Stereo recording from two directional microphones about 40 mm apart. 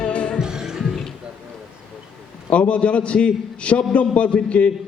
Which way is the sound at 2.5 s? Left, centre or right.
Left.